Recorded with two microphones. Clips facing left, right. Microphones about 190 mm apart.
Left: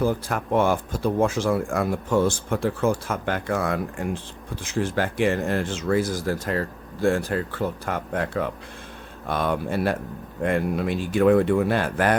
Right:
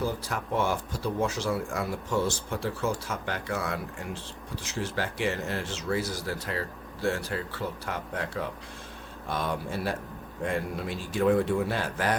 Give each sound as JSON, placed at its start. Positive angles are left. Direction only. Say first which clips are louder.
{"t": 0.0, "sound": "speech", "louder": "left 7 dB", "side_deg": 55}